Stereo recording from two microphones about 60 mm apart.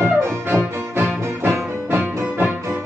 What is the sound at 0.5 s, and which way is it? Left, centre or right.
Music, right.